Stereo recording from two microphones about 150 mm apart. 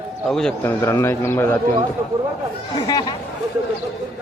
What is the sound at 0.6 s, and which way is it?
Speech, 20° left (ahead or behind).